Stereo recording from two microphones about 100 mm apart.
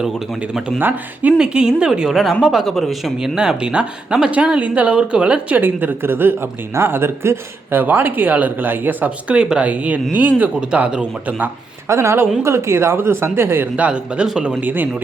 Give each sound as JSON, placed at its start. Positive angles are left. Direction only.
{"t": 0.8, "sound": "speech", "side_deg": -20}
{"t": 1.4, "sound": "speech", "side_deg": -10}
{"t": 11.9, "sound": "speech", "side_deg": -25}
{"t": 13.7, "sound": "speech", "side_deg": -10}